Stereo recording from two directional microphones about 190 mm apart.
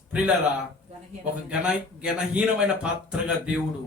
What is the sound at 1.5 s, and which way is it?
Speech, 5° right (ahead or behind).